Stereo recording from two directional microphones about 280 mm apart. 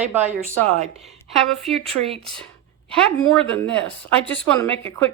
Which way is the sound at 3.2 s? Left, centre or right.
Centre.